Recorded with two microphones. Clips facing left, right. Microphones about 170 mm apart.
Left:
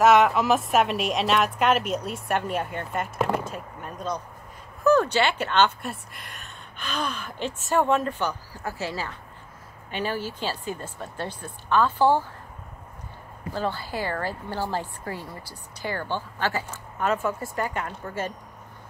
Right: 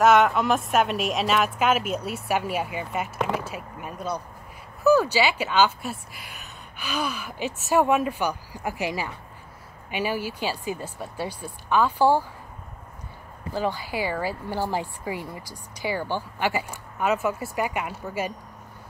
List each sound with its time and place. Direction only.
0.0 s a woman's voice: centre (ahead or behind)
13.5 s a woman's voice: 10° right (ahead or behind)